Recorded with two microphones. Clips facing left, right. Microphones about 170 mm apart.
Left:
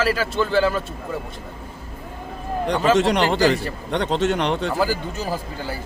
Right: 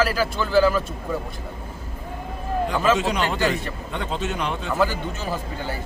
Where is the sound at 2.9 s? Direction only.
80° left.